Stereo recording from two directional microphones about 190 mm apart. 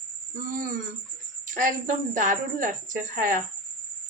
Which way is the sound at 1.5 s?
45° right (ahead or behind).